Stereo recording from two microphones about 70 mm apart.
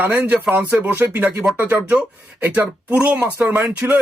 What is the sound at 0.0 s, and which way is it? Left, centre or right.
Speech, right.